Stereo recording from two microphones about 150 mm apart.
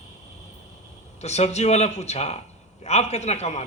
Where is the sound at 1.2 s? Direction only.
45° left (ahead or behind).